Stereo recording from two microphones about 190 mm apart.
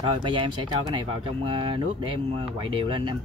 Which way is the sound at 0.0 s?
25° right (ahead or behind).